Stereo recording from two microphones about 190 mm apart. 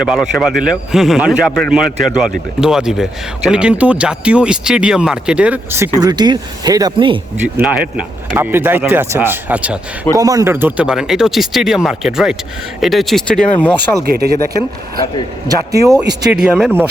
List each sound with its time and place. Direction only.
0.0 s speech: centre (ahead or behind)
6.0 s speech: 20° right (ahead or behind)
7.4 s speech: 10° right (ahead or behind)
10.2 s speech: 20° right (ahead or behind); by 13.7 s 5° left (ahead or behind)
14.0 s speech: 55° right (ahead or behind)
15.4 s speech: 20° right (ahead or behind)
16.3 s speech: 5° right (ahead or behind)